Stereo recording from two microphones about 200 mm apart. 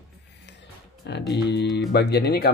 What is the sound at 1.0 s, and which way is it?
Speech, 55° left (ahead or behind).